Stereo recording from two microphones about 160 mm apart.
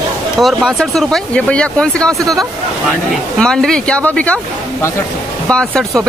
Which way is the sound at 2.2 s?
20° right (ahead or behind).